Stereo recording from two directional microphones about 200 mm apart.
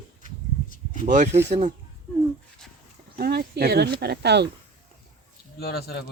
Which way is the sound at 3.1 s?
50° right (ahead or behind).